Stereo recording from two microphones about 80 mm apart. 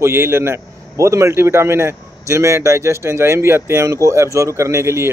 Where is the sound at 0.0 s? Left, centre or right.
Right.